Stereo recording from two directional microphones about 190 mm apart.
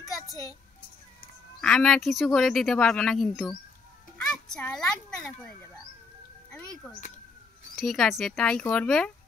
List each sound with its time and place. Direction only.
0.1 s a sound: 20° left (ahead or behind)
1.6 s a child's voice: 5° left (ahead or behind)
7.7 s speech: centre (ahead or behind)